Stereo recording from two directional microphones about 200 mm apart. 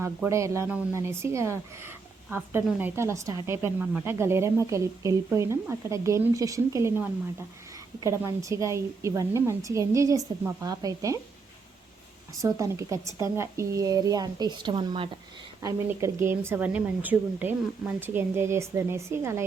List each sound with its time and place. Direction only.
0.0 s speech: 15° right (ahead or behind)
12.4 s speech: 15° right (ahead or behind)
15.6 s speech: 15° right (ahead or behind)